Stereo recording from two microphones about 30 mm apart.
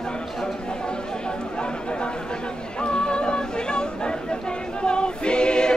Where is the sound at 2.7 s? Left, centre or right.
Left.